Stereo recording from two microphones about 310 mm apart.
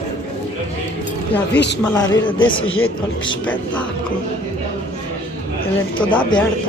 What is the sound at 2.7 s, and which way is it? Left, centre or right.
Speech, left.